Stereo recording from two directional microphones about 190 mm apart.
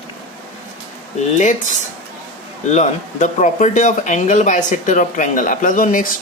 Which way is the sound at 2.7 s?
40° left (ahead or behind).